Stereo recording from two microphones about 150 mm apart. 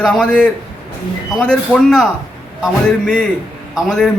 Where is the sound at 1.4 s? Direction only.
5° left (ahead or behind).